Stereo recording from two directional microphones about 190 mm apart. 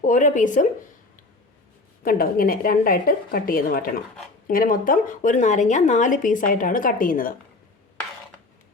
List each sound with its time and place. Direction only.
0.0 s speech: 45° left (ahead or behind)
2.0 s speech: 50° left (ahead or behind)